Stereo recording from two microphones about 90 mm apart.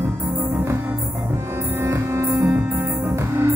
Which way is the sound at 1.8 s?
30° right (ahead or behind).